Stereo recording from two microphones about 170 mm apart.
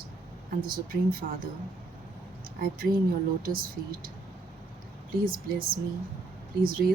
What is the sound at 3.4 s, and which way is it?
Speech, 60° right (ahead or behind).